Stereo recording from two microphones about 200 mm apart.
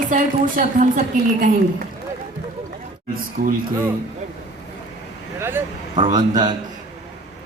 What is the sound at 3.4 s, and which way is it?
Speech, 45° right (ahead or behind).